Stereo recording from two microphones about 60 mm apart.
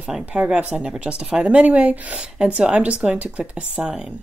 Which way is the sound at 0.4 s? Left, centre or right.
Centre.